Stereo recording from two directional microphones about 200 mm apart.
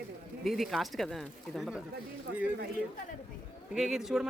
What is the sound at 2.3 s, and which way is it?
Speech, 60° right (ahead or behind).